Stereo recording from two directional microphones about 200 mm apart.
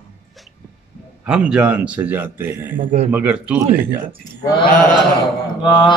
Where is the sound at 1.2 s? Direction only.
5° right (ahead or behind).